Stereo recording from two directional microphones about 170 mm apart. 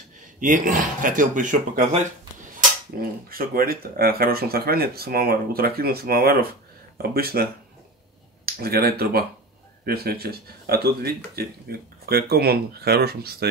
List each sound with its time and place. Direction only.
0.4 s speech: 50° right (ahead or behind)
1.9 s a sound: 45° right (ahead or behind)
3.0 s speech: 60° right (ahead or behind)
8.5 s speech: 65° right (ahead or behind)